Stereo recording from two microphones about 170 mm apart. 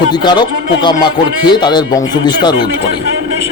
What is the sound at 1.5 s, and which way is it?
A man's voice, 25° left (ahead or behind).